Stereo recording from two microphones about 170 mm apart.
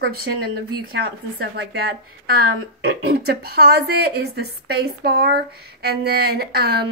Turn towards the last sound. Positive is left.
turn(degrees=-75)  # may be behind; listen again after turning